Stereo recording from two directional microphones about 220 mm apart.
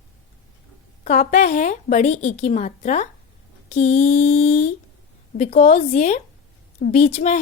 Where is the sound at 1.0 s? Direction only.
35° left (ahead or behind).